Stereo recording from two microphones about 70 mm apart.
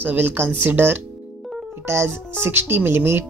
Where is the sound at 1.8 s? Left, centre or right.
Right.